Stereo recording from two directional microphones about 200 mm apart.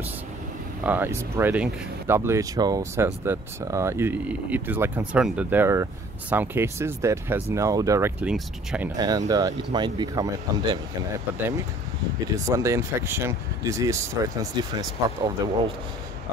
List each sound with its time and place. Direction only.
0.8 s speech: 10° right (ahead or behind)
8.9 s speech: 20° right (ahead or behind)
12.4 s speech: 15° right (ahead or behind)